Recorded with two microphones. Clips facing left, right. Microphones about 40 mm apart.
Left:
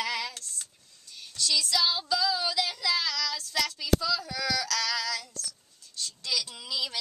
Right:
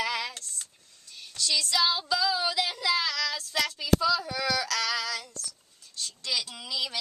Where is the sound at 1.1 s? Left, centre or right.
Centre.